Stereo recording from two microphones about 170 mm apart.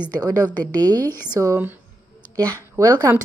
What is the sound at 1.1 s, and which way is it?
Speech, 10° left (ahead or behind).